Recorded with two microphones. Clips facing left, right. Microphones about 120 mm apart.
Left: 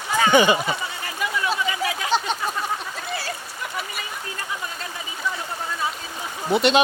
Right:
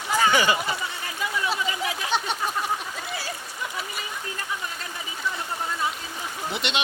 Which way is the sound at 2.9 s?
10° right (ahead or behind).